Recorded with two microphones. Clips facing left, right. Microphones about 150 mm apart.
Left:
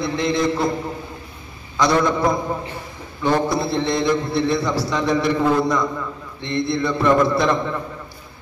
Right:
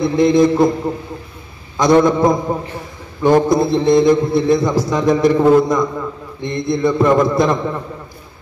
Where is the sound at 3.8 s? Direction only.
45° right (ahead or behind).